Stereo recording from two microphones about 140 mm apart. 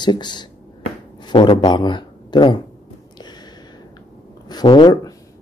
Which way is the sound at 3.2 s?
30° left (ahead or behind).